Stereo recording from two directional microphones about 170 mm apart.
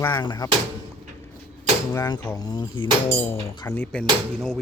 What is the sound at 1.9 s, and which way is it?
Speech, 25° left (ahead or behind).